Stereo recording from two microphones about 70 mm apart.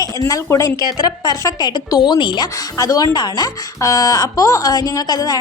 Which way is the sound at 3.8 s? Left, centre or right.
Left.